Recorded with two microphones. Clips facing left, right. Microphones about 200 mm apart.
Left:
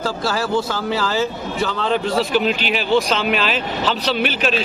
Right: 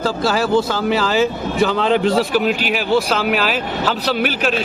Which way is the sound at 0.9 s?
20° right (ahead or behind).